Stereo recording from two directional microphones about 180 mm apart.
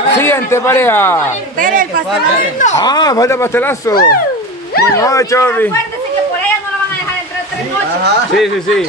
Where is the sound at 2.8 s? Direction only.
20° left (ahead or behind).